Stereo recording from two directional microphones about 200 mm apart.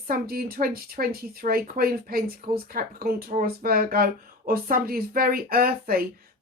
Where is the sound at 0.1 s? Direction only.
50° right (ahead or behind).